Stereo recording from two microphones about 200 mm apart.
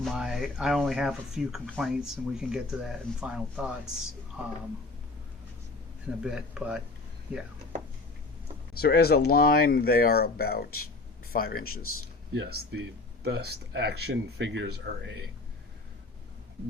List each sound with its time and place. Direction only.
0.0 s speech: centre (ahead or behind)
6.2 s speech: 5° right (ahead or behind)
8.8 s speech: 50° left (ahead or behind)
11.6 s speech: 90° left
12.3 s speech: 55° right (ahead or behind)